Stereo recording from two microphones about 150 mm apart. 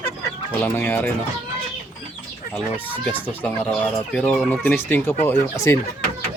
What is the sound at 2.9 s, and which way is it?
Speech, 10° left (ahead or behind).